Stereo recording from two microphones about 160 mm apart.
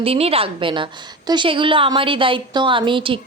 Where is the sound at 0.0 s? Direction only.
35° right (ahead or behind).